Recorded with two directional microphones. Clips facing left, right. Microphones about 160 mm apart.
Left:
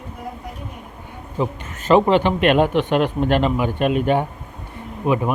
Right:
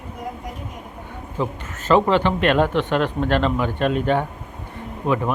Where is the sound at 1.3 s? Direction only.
15° left (ahead or behind).